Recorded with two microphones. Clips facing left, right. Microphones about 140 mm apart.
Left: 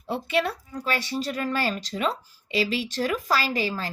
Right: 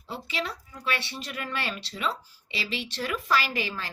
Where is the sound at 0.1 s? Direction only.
55° left (ahead or behind).